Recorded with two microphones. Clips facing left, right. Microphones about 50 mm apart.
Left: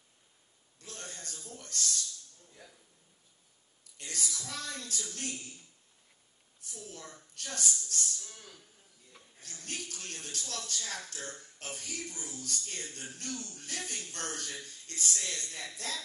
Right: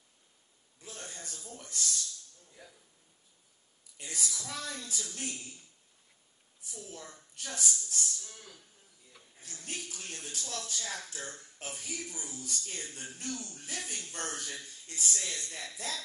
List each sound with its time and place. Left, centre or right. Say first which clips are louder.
0.7 s a man's voice: even; centre
2.5 s a sound: right 1 dB; centre
4.0 s speech: even; centre
6.7 s speech: right 1 dB; centre